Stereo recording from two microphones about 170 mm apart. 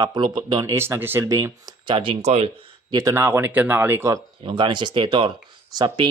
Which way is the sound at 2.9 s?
20° right (ahead or behind).